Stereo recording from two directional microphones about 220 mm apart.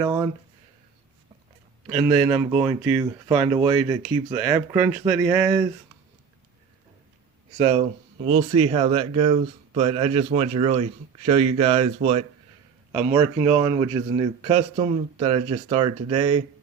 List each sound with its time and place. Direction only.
0.0 s speech: 15° right (ahead or behind)
1.9 s speech: 10° right (ahead or behind)
7.6 s speech: 25° right (ahead or behind)
13.1 s speech: 15° right (ahead or behind)